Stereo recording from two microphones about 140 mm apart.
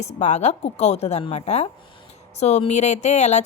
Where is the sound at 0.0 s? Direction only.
55° left (ahead or behind).